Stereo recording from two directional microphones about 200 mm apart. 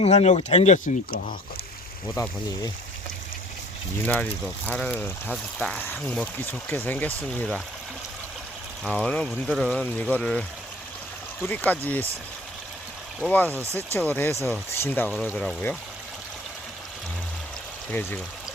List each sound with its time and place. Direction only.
0.0 s speech: 30° left (ahead or behind)
2.2 s speech: 15° left (ahead or behind)
4.0 s speech: 10° left (ahead or behind)
8.8 s speech: 5° left (ahead or behind)
11.4 s speech: 10° left (ahead or behind)
13.2 s speech: 10° left (ahead or behind)
17.9 s speech: 10° left (ahead or behind)